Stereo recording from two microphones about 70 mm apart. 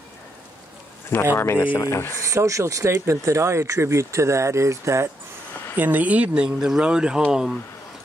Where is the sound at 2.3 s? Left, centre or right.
Right.